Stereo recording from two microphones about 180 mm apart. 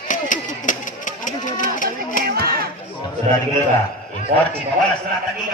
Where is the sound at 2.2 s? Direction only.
55° right (ahead or behind).